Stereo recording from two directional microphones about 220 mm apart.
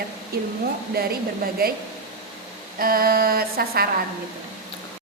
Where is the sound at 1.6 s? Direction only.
45° right (ahead or behind).